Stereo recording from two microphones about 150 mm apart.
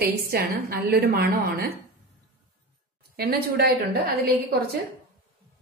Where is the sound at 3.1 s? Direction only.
90° right.